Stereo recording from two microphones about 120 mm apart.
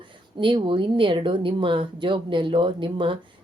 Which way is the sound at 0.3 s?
45° right (ahead or behind).